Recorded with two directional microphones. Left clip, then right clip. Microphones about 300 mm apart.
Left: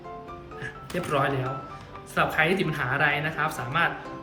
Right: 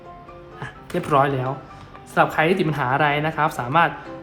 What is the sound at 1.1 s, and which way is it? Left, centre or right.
Speech, centre.